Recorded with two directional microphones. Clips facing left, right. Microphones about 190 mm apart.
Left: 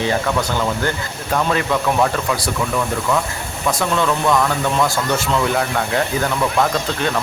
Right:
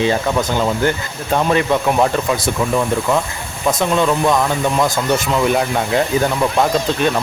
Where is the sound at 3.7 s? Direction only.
20° right (ahead or behind).